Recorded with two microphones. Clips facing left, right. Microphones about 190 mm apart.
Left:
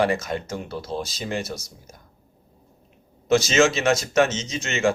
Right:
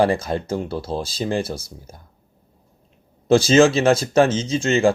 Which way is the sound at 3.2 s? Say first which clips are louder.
Right 5 dB; 30° right (ahead or behind).